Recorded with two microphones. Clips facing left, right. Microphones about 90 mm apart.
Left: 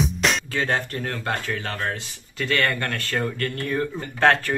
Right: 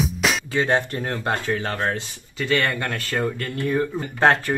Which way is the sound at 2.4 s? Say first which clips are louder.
Right 1 dB; 5° right (ahead or behind).